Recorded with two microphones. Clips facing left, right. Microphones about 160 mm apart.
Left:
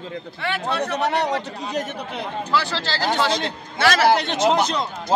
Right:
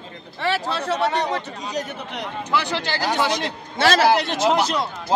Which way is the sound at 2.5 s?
20° right (ahead or behind).